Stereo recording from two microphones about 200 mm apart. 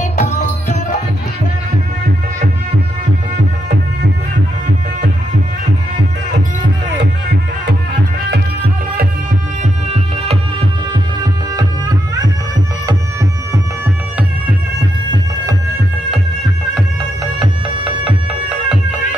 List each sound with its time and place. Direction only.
0.0 s music: 40° left (ahead or behind)